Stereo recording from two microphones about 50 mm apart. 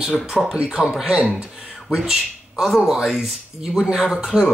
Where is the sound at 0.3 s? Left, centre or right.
Centre.